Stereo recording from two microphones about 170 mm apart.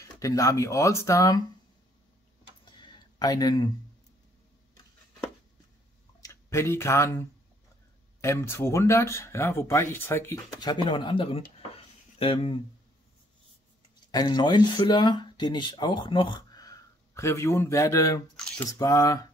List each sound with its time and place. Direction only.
0.0 s speech: 20° left (ahead or behind)
2.6 s a sound: 25° left (ahead or behind)
6.2 s speech: 15° left (ahead or behind); by 12.5 s 30° left (ahead or behind)
14.1 s speech: 25° left (ahead or behind)
18.3 s squish: 5° left (ahead or behind)
18.7 s speech: 20° left (ahead or behind)